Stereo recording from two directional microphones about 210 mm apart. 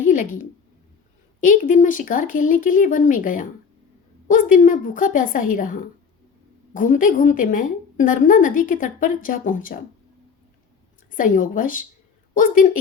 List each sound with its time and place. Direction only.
0.0 s a sound: 40° left (ahead or behind)
1.4 s a woman's voice: 40° left (ahead or behind)
11.1 s a woman's voice: 40° left (ahead or behind)